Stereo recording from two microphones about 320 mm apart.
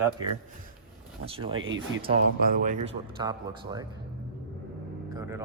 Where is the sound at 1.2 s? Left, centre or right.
Centre.